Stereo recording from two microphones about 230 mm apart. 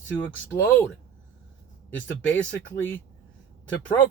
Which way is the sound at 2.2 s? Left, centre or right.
Centre.